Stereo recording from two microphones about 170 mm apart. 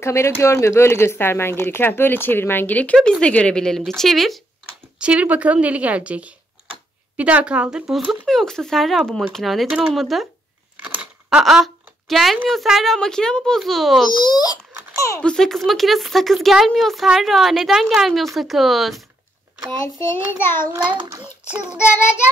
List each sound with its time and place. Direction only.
0.0 s a woman's voice: 15° left (ahead or behind); by 10.2 s centre (ahead or behind)
10.8 s a sound: 10° right (ahead or behind)
12.4 s speech: centre (ahead or behind)
14.2 s babbling: 25° left (ahead or behind)
15.2 s speech: 5° left (ahead or behind)
20.8 s a child's voice: 25° right (ahead or behind)
21.2 s a woman's voice: 5° right (ahead or behind)